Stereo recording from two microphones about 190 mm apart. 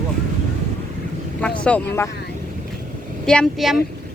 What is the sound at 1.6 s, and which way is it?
Speech, 10° left (ahead or behind).